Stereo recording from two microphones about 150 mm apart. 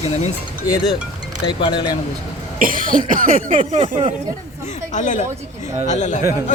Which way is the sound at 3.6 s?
45° right (ahead or behind).